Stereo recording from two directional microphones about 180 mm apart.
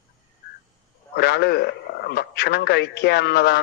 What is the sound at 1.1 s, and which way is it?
A man's voice, 65° left (ahead or behind).